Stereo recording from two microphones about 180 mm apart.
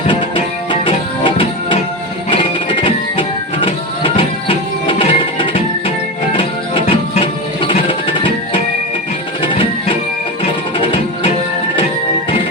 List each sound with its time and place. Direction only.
0.1 s music: 25° left (ahead or behind)